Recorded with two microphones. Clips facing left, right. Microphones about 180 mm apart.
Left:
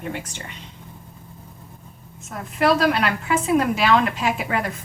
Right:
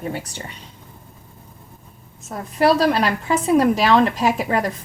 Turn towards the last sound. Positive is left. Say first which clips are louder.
# right 4 dB
turn(degrees=-35)  # may be behind; listen again after turning